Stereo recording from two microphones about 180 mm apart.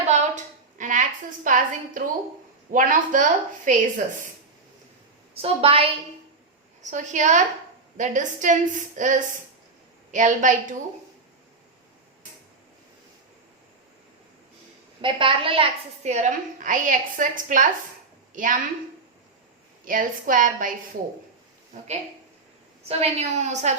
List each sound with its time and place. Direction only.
0.8 s a woman's voice: 45° right (ahead or behind)
5.3 s a woman's voice: 35° right (ahead or behind)
6.9 s a woman's voice: 45° right (ahead or behind)
15.0 s a woman's voice: 30° right (ahead or behind); by 18.6 s 45° right (ahead or behind)
19.8 s a woman's voice: 50° right (ahead or behind)
22.9 s a woman's voice: 35° right (ahead or behind)